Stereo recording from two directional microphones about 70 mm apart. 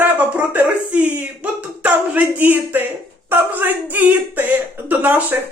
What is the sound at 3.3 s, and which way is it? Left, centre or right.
Speech, right.